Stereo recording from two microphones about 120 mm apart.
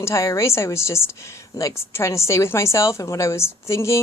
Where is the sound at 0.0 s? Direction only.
25° left (ahead or behind).